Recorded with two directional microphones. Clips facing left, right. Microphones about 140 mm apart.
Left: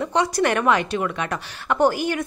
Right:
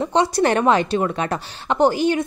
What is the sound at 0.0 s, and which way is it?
A woman's voice, 30° right (ahead or behind).